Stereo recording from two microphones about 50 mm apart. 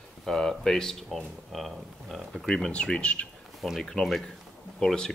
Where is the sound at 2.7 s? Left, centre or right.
Left.